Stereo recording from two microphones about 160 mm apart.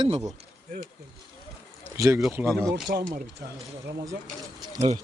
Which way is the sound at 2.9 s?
55° right (ahead or behind).